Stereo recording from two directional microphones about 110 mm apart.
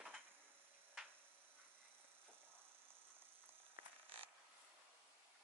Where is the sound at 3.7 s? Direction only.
55° right (ahead or behind).